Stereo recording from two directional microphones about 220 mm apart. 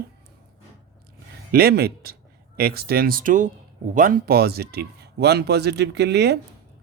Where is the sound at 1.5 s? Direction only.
45° right (ahead or behind).